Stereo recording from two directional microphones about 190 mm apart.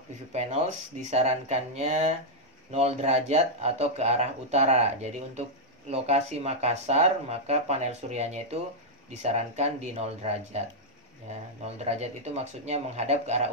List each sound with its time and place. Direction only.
0.3 s speech: 35° right (ahead or behind)